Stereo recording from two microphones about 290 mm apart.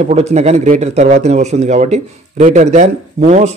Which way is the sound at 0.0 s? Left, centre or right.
Right.